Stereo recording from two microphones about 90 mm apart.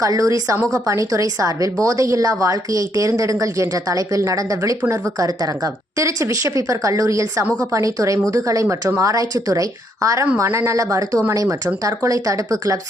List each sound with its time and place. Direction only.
0.0 s a woman's voice: 40° right (ahead or behind)